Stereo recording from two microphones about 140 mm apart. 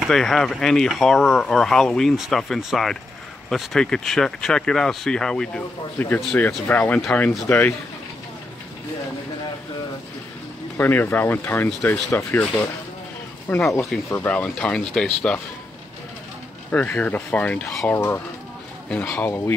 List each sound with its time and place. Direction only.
0.0 s speech: centre (ahead or behind)
10.8 s speech: 15° left (ahead or behind)
13.5 s speech: 15° left (ahead or behind)
16.7 s speech: 10° left (ahead or behind)